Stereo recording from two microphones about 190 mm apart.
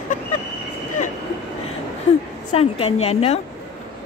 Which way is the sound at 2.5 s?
30° left (ahead or behind).